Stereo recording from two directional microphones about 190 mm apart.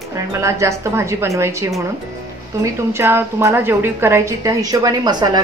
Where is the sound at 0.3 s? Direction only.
15° right (ahead or behind).